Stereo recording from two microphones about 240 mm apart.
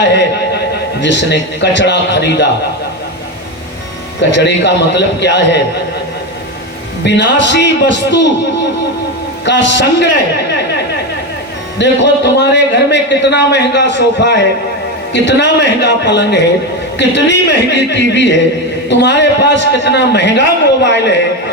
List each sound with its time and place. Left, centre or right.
0.1 s a sound: left
1.0 s a man's voice: left
4.2 s a man's voice: left
7.0 s a man's voice: left
9.4 s a man's voice: left
11.8 s a man's voice: left